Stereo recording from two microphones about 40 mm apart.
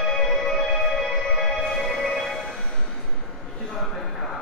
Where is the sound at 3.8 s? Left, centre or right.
Centre.